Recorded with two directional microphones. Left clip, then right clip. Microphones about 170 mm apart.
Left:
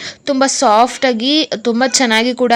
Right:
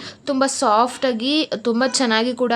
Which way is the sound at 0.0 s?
20° left (ahead or behind).